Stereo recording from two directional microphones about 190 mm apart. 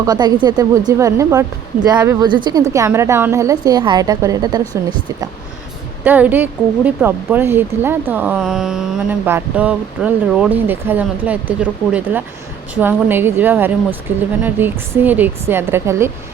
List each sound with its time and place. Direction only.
0.0 s speech: 20° right (ahead or behind)
6.1 s speech: 10° right (ahead or behind)